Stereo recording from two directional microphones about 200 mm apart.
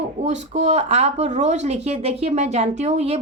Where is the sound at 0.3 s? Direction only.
35° right (ahead or behind).